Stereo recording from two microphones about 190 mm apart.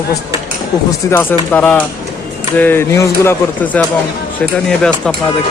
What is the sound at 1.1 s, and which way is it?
Speech, 10° left (ahead or behind).